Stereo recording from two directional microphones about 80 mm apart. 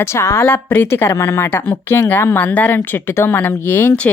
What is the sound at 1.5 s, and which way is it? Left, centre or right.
Speech, left.